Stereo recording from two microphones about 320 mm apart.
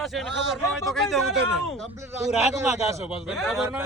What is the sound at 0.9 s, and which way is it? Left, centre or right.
Speech, centre.